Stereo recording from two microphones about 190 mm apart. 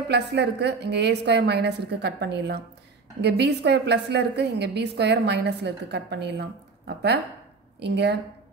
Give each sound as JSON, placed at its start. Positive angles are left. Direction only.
{"t": 0.1, "sound": "a woman's voice", "side_deg": -65}
{"t": 7.8, "sound": "a woman's voice", "side_deg": -65}